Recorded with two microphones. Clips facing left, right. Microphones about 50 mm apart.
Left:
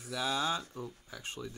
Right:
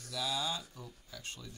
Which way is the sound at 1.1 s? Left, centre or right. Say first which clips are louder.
Left 5 dB; left.